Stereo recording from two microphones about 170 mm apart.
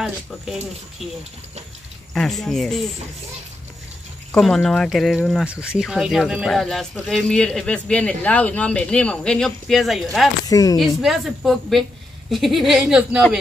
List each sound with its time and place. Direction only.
2.1 s speech: centre (ahead or behind)
4.3 s speech: 5° left (ahead or behind)
10.5 s a woman's voice: 20° left (ahead or behind)
10.8 s speech: centre (ahead or behind)